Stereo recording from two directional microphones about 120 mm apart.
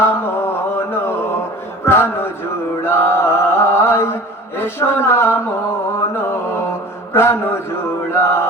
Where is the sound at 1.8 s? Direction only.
20° left (ahead or behind).